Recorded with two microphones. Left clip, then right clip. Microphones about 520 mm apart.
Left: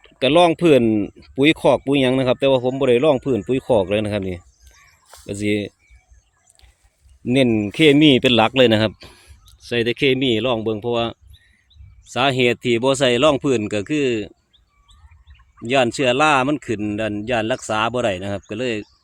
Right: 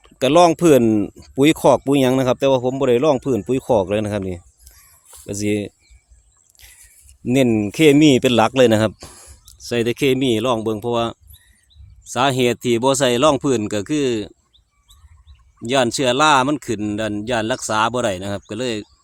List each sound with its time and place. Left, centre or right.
0.0 s speech: right
6.6 s a sound: right
7.3 s speech: right
15.6 s speech: right